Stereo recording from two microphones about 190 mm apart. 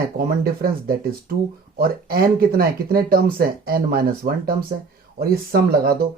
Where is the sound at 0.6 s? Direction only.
50° right (ahead or behind).